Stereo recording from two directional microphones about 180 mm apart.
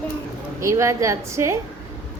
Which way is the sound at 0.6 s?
15° right (ahead or behind).